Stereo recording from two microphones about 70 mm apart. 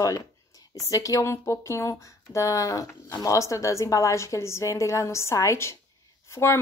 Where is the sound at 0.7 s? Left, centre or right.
Left.